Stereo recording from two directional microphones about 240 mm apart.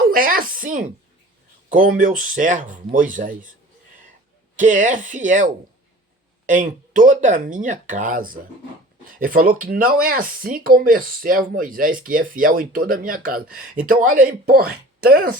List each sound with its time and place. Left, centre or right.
0.1 s speech: right
4.5 s speech: right